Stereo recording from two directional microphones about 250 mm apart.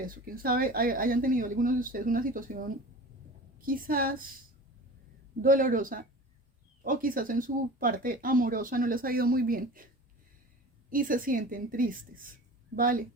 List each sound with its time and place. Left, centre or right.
0.0 s speech: right
3.7 s speech: right
5.4 s speech: right
10.8 s speech: right